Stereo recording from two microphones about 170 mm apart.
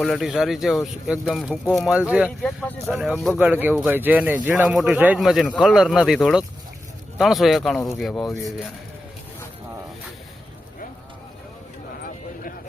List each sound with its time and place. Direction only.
0.0 s speech: centre (ahead or behind)
2.4 s speech: 5° left (ahead or behind)
3.3 s speech: 10° right (ahead or behind)
12.0 s a sound: 55° left (ahead or behind)